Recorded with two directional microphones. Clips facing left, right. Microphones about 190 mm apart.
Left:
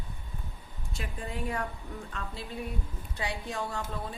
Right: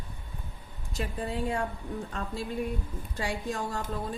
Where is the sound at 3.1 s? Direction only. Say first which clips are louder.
Right 3 dB; 45° right (ahead or behind).